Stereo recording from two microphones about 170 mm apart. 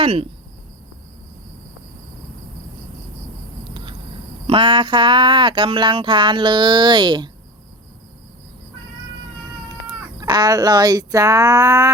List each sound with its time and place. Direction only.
0.0 s speech: 35° right (ahead or behind)
4.4 s speech: 30° right (ahead or behind)
10.2 s speech: 25° right (ahead or behind)